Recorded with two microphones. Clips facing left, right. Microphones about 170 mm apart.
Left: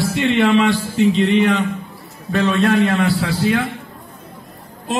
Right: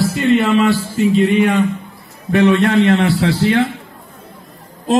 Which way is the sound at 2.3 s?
15° right (ahead or behind).